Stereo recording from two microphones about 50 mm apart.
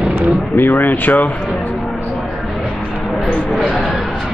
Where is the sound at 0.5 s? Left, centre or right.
Left.